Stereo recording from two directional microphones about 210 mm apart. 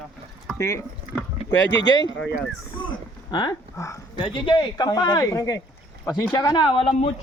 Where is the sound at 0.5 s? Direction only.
15° left (ahead or behind).